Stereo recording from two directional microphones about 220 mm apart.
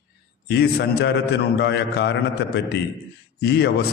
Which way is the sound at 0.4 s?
50° left (ahead or behind).